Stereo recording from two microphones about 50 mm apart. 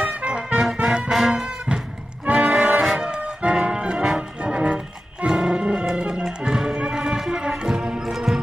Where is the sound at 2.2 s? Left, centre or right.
Right.